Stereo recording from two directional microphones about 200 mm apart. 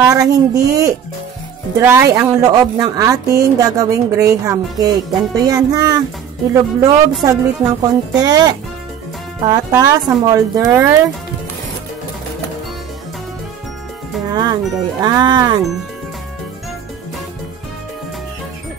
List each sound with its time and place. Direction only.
0.0 s a woman's voice: 15° right (ahead or behind)
9.7 s a woman's voice: 15° right (ahead or behind)
14.3 s speech: 20° right (ahead or behind)